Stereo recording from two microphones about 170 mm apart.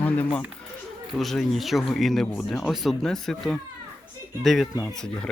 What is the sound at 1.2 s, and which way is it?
Speech, centre (ahead or behind).